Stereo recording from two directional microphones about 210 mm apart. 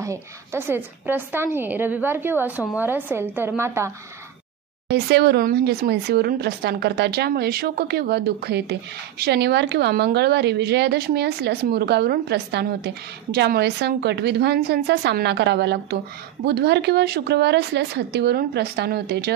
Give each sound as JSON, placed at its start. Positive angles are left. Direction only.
{"t": 0.0, "sound": "a woman's voice", "side_deg": -15}
{"t": 4.8, "sound": "a woman's voice", "side_deg": -50}